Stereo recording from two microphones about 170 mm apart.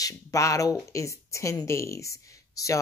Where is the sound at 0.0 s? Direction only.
20° left (ahead or behind).